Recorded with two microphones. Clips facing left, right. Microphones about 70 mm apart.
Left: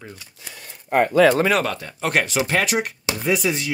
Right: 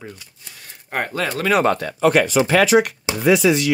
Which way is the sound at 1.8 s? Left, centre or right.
Right.